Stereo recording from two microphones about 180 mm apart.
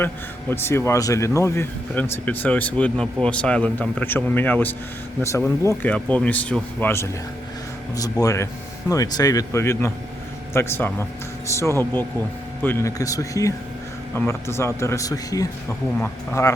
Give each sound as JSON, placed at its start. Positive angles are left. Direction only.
{"t": 0.5, "sound": "speech", "side_deg": 15}
{"t": 8.2, "sound": "speech", "side_deg": 20}